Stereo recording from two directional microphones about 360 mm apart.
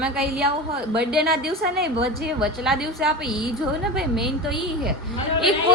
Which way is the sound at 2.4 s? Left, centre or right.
Centre.